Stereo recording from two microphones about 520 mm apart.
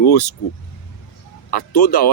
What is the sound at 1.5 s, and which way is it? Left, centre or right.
Speech, left.